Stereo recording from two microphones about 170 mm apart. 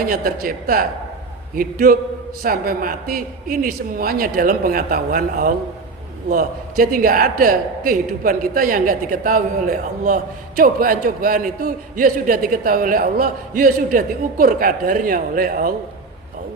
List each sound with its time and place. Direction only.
0.0 s a man's voice: 60° right (ahead or behind)